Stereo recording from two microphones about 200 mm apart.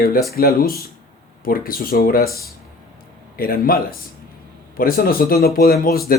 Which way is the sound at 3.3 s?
45° left (ahead or behind).